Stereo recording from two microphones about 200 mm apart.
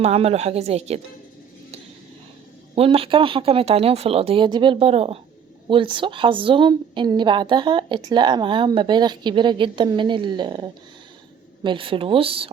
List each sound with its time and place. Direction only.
0.0 s a woman's voice: 30° right (ahead or behind)
2.7 s a woman's voice: 30° right (ahead or behind)